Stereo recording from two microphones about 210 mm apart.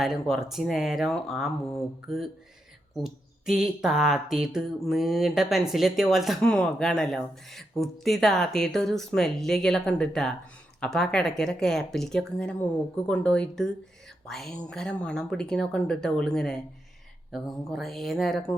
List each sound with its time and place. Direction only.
0.0 s speech: centre (ahead or behind)